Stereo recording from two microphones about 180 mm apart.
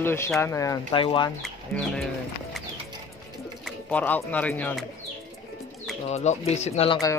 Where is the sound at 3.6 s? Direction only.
10° left (ahead or behind).